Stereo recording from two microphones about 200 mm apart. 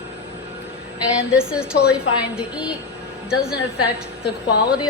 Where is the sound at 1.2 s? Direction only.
5° right (ahead or behind).